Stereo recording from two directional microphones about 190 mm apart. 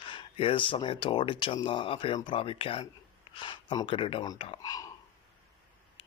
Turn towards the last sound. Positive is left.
turn(degrees=20)  # may be behind; listen again after turning